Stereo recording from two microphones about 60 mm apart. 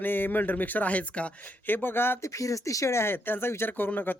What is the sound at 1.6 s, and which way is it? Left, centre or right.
Speech, left.